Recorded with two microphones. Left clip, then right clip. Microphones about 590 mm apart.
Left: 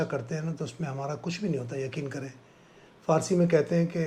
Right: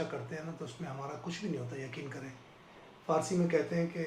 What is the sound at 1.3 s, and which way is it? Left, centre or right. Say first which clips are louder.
Speech: left 7 dB; left.